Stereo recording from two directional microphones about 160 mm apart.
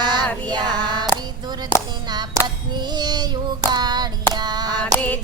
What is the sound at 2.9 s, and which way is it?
Child singing, 25° right (ahead or behind).